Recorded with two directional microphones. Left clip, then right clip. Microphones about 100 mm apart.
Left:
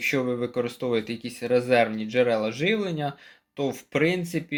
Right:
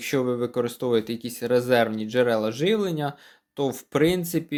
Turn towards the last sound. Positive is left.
turn(degrees=-60)  # may be behind; listen again after turning